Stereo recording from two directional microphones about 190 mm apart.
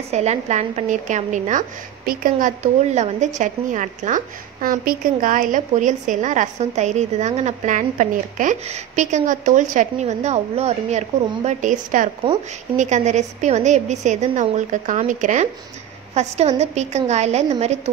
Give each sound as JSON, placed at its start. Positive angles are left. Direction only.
{"t": 0.1, "sound": "a woman's voice", "side_deg": -35}